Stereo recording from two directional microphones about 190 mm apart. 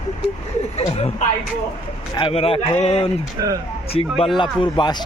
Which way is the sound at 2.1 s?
30° left (ahead or behind).